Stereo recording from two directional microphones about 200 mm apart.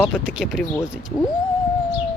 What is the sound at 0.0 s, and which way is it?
Speech, 5° right (ahead or behind).